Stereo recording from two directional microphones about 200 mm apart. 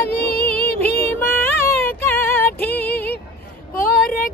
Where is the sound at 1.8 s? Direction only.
10° left (ahead or behind).